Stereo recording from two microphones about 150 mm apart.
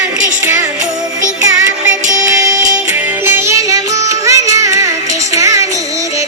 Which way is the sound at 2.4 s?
20° right (ahead or behind).